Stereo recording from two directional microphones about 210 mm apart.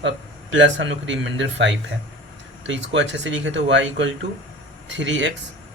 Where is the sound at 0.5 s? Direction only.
60° right (ahead or behind).